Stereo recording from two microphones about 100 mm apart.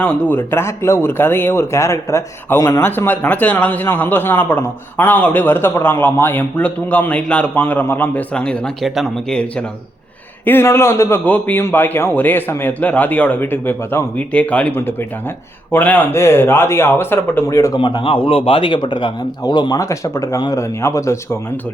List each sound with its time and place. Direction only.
0.0 s speech: 15° left (ahead or behind)
10.4 s speech: 25° left (ahead or behind)
17.5 s speech: 35° left (ahead or behind)
17.7 s a man's voice: 55° left (ahead or behind)
19.8 s speech: 30° left (ahead or behind)